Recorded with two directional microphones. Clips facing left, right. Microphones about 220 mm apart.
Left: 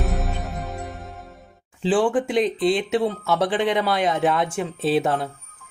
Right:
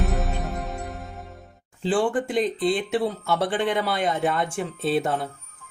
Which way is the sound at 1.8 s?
Centre (ahead or behind).